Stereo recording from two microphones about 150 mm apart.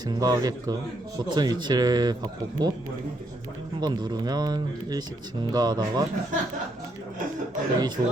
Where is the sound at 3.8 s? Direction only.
25° right (ahead or behind).